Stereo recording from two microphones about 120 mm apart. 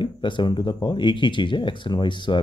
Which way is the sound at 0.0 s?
40° left (ahead or behind).